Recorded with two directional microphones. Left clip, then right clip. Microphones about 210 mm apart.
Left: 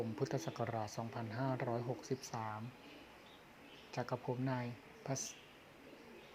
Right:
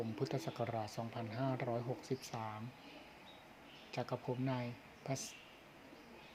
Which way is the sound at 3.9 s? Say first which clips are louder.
Even; centre (ahead or behind).